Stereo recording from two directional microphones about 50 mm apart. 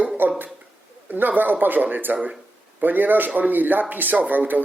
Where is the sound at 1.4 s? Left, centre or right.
Right.